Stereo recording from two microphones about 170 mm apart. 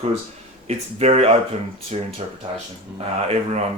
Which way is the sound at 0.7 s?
40° right (ahead or behind).